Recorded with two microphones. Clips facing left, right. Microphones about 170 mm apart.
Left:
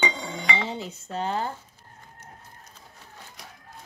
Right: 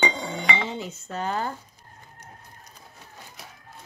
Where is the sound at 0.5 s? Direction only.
35° left (ahead or behind).